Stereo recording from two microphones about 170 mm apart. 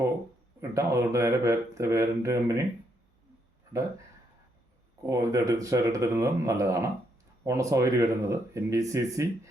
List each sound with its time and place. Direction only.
0.7 s speech: 20° right (ahead or behind)
3.7 s speech: 20° right (ahead or behind)
5.0 s speech: 20° right (ahead or behind)